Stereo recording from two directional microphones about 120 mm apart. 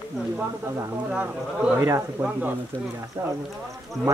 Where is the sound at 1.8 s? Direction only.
20° right (ahead or behind).